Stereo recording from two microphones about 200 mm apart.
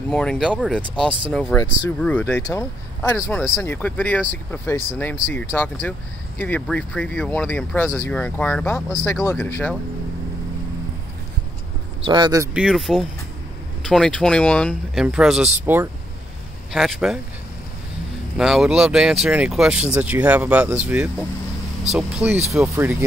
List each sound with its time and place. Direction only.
0.1 s speech: 5° left (ahead or behind)
1.6 s speech: 20° left (ahead or behind)
2.0 s speech: 5° left (ahead or behind)
12.1 s speech: 20° right (ahead or behind)
12.5 s speech: centre (ahead or behind)
18.4 s speech: centre (ahead or behind)